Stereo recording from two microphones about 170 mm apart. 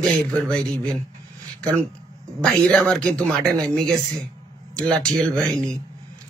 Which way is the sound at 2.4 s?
5° left (ahead or behind).